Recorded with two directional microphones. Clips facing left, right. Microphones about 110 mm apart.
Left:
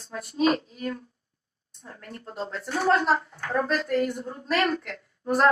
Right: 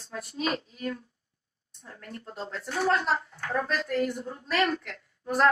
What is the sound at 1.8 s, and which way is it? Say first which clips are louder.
Speech: left 1 dB; 25° left (ahead or behind).